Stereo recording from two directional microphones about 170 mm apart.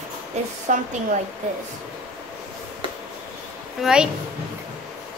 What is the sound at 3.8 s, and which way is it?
Speech, 5° right (ahead or behind).